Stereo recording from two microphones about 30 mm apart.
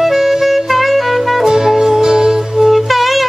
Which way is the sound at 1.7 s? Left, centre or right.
Centre.